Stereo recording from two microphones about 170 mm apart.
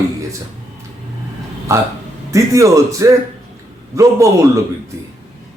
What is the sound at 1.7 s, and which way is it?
A man's voice, 20° right (ahead or behind).